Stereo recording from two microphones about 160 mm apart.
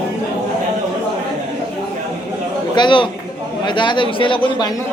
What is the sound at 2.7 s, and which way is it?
A man's voice, 30° left (ahead or behind).